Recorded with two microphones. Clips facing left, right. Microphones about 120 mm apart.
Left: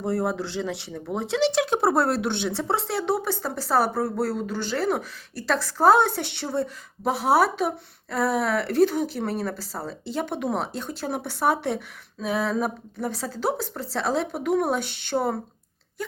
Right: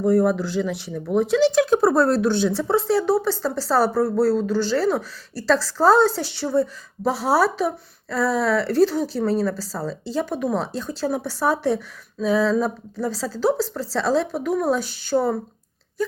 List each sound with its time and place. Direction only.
0.0 s a woman's voice: 25° left (ahead or behind)
14.8 s speech: 65° left (ahead or behind)